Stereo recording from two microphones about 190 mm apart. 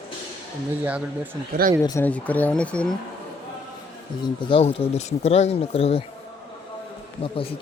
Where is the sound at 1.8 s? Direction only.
10° left (ahead or behind).